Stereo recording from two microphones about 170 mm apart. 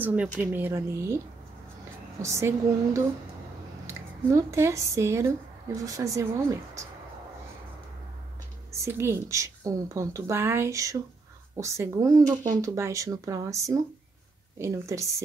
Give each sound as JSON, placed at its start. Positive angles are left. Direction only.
{"t": 0.0, "sound": "a woman's voice", "side_deg": -10}
{"t": 2.2, "sound": "a woman's voice", "side_deg": -15}
{"t": 8.7, "sound": "a woman's voice", "side_deg": -15}